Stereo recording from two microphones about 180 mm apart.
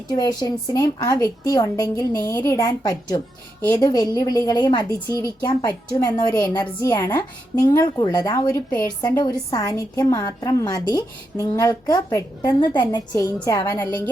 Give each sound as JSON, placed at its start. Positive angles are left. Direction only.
{"t": 0.1, "sound": "a woman's voice", "side_deg": 25}